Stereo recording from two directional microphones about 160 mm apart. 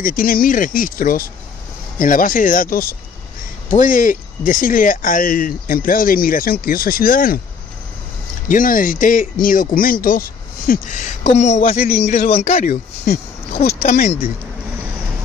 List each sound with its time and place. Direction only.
0.0 s speech: 60° left (ahead or behind)
8.5 s speech: 60° left (ahead or behind)
11.3 s speech: 45° left (ahead or behind)
11.7 s speech: 70° left (ahead or behind)
12.0 s speech: 45° left (ahead or behind)
13.7 s speech: 70° left (ahead or behind)